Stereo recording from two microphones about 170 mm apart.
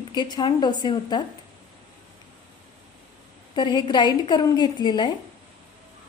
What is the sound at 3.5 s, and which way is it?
A woman's voice, 25° left (ahead or behind).